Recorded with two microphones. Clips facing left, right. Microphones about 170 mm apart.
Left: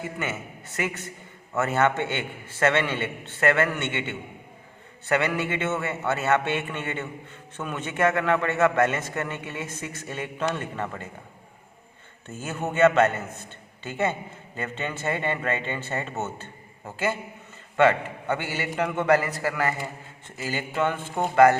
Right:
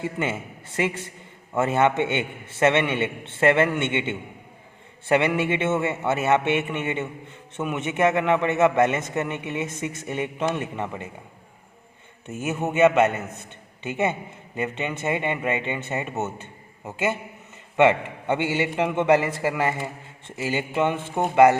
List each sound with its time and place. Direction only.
0.0 s a man's voice: 25° right (ahead or behind)
12.3 s a man's voice: 20° right (ahead or behind)